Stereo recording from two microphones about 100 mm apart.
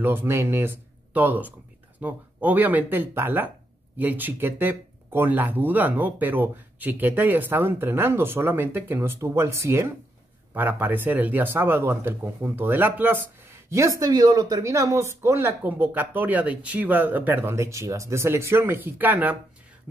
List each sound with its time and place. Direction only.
0.0 s speech: 20° right (ahead or behind)